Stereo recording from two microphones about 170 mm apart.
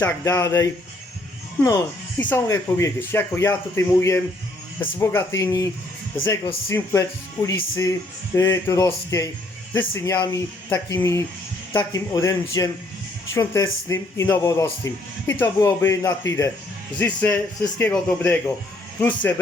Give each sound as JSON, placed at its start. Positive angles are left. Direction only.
{"t": 0.0, "sound": "speech", "side_deg": 15}
{"t": 6.7, "sound": "speech", "side_deg": 15}